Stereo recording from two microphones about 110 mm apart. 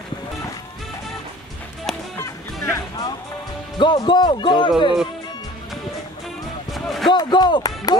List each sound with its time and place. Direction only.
2.1 s music: 25° left (ahead or behind)
3.7 s speech: 45° left (ahead or behind)
6.7 s basketball bounce: centre (ahead or behind)
7.1 s speech: 40° left (ahead or behind)